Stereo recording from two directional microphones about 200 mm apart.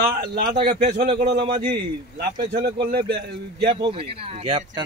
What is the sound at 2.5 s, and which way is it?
A man's voice, 55° right (ahead or behind).